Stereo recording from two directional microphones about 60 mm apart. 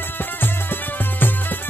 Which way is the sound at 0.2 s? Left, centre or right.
Left.